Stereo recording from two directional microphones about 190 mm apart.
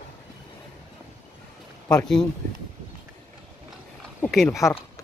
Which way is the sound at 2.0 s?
5° left (ahead or behind).